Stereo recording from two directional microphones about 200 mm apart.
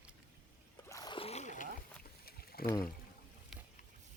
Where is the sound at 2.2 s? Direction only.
50° left (ahead or behind).